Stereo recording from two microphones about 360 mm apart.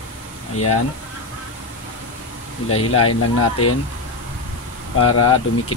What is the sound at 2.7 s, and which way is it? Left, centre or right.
Speech, left.